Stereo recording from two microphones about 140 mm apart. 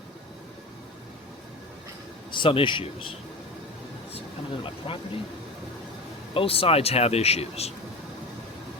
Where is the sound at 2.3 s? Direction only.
35° left (ahead or behind).